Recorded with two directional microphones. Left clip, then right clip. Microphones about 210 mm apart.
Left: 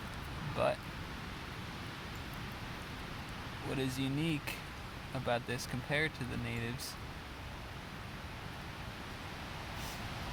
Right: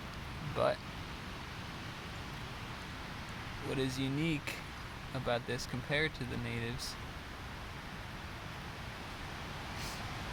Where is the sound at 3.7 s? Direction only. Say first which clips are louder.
Right 1 dB; 15° right (ahead or behind).